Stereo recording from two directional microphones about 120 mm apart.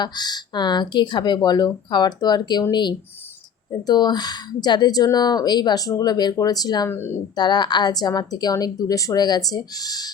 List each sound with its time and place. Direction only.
0.0 s speech: 35° left (ahead or behind)
6.8 s speech: 20° left (ahead or behind)
7.3 s speech: 35° left (ahead or behind)